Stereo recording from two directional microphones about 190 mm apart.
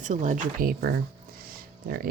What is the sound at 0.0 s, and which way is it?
Speech, 40° right (ahead or behind).